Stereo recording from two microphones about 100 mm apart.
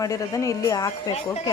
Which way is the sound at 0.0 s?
35° left (ahead or behind).